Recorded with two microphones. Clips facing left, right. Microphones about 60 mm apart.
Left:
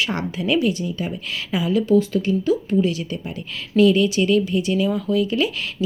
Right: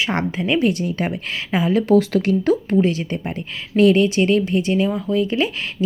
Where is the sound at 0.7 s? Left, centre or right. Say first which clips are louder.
Right 4 dB; right.